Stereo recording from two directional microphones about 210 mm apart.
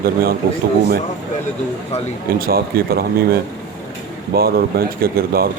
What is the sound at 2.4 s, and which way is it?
Speech, 45° right (ahead or behind).